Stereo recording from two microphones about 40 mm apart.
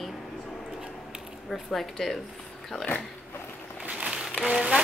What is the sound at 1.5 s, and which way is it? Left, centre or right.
Speech, centre.